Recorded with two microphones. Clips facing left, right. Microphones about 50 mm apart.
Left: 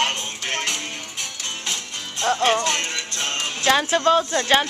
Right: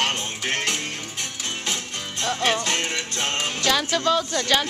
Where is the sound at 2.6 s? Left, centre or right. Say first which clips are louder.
Left 1 dB; centre.